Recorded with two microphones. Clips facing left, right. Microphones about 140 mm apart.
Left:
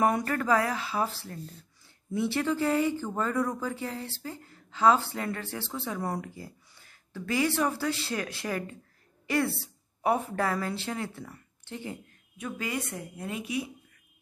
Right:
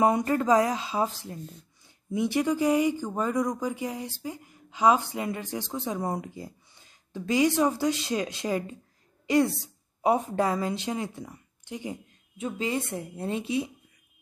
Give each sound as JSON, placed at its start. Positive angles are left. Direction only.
{"t": 0.0, "sound": "a woman's voice", "side_deg": -20}